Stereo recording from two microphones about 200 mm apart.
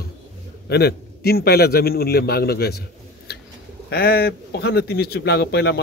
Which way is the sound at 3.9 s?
50° left (ahead or behind).